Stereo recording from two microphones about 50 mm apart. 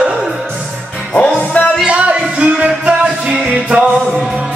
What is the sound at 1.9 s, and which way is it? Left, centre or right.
Music, right.